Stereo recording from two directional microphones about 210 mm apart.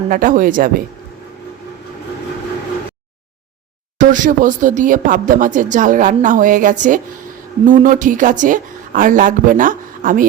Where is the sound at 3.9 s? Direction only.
40° right (ahead or behind).